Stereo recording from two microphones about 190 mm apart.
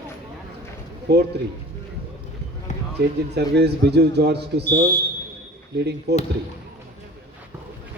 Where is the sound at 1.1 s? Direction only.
60° right (ahead or behind).